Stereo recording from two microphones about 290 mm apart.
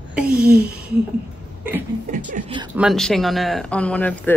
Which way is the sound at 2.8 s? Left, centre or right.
Centre.